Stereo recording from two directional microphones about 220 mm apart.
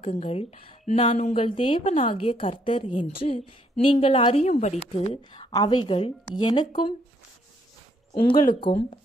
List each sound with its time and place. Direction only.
0.0 s speech: 30° left (ahead or behind)
8.1 s speech: 20° left (ahead or behind)